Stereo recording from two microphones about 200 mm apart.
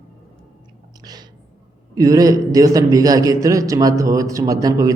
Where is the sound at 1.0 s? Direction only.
20° right (ahead or behind).